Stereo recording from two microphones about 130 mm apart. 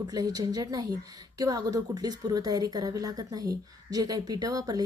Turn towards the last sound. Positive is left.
turn(degrees=-30)  # may be behind; listen again after turning